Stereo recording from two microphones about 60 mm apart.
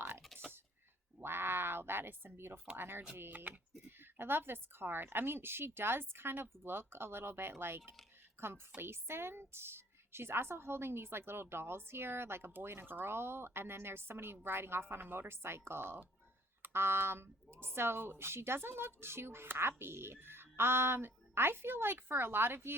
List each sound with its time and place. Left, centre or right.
1.2 s quack: right
2.7 s a woman's voice: right